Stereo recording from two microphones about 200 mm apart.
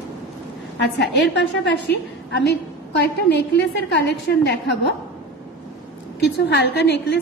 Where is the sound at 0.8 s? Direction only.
60° left (ahead or behind).